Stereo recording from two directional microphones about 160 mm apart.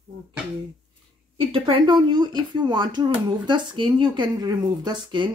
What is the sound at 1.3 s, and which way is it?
Speech, 35° right (ahead or behind).